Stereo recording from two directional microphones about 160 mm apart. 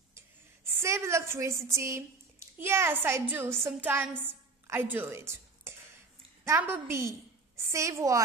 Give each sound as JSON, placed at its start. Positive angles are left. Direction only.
{"t": 0.7, "sound": "a woman's voice", "side_deg": -15}